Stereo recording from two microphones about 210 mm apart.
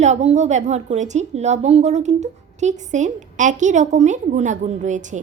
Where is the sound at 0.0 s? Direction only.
30° right (ahead or behind).